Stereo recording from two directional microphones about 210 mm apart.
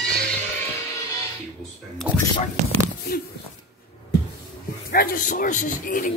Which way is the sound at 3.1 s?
45° left (ahead or behind).